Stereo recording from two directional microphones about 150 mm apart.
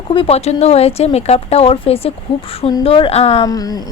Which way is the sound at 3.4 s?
25° left (ahead or behind).